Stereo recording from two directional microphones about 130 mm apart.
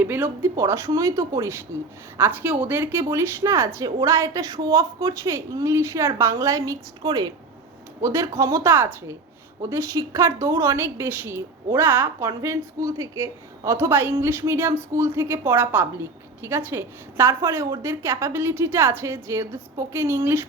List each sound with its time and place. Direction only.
0.0 s a woman's voice: 15° right (ahead or behind)